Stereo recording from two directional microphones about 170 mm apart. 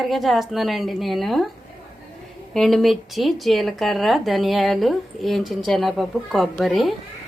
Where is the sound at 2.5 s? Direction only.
Centre (ahead or behind).